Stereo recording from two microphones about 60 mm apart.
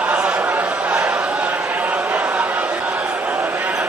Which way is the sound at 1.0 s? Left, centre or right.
Right.